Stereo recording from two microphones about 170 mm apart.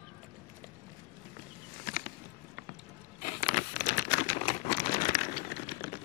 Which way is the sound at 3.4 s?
55° left (ahead or behind).